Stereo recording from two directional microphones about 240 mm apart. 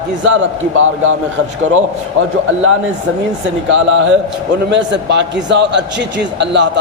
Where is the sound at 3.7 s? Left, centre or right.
Right.